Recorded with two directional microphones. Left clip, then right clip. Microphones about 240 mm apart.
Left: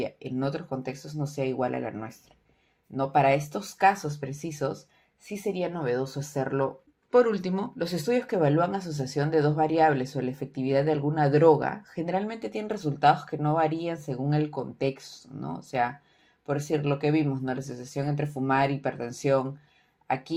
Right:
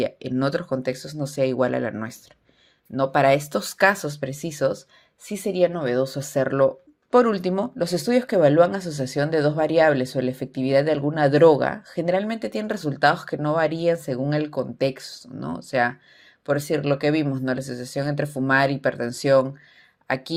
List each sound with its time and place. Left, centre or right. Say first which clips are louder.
0.0 s speech: right 7 dB; right